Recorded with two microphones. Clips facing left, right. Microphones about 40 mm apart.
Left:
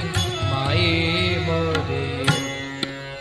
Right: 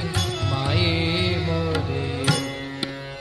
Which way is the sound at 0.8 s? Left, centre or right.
Left.